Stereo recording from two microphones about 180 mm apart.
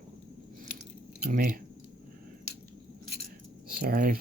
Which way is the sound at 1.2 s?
50° right (ahead or behind).